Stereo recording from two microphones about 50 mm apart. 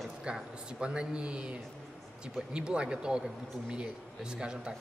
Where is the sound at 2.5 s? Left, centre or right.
Centre.